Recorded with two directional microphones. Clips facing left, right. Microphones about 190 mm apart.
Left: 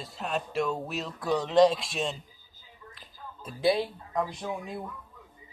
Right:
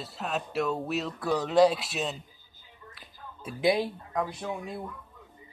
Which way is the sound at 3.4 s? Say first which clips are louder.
Even; 15° right (ahead or behind).